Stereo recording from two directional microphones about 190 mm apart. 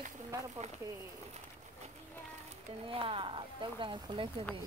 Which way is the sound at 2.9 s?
30° right (ahead or behind).